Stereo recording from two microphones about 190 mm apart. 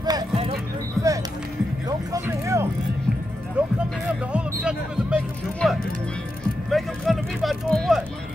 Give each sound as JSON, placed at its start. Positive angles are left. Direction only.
{"t": 0.0, "sound": "music", "side_deg": -20}
{"t": 1.0, "sound": "music", "side_deg": 0}
{"t": 1.9, "sound": "music", "side_deg": -15}
{"t": 6.7, "sound": "vehicle", "side_deg": 0}